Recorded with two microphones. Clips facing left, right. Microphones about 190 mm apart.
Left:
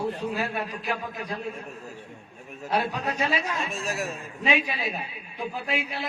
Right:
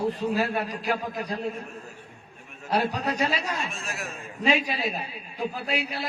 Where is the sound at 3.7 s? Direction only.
35° left (ahead or behind).